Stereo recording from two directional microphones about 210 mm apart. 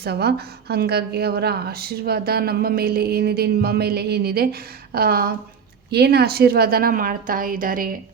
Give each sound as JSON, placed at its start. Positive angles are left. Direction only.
{"t": 0.0, "sound": "a woman's voice", "side_deg": -50}